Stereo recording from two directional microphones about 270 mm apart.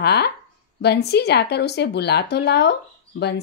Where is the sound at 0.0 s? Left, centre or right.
Left.